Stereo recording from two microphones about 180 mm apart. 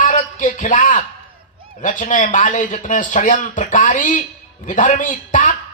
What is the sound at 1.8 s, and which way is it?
A man's voice, 45° left (ahead or behind).